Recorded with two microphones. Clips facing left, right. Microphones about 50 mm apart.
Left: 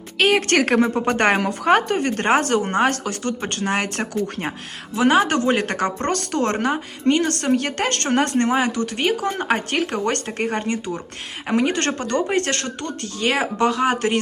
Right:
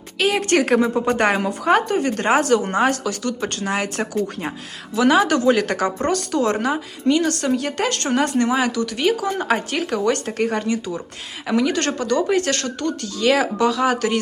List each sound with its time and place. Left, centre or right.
0.2 s a woman's voice: left
4.9 s speech: left
6.1 s a woman's voice: left